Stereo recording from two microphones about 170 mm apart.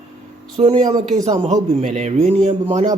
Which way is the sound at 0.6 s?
40° right (ahead or behind).